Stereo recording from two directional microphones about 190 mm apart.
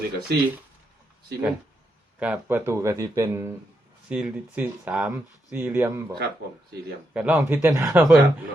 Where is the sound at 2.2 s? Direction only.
10° right (ahead or behind).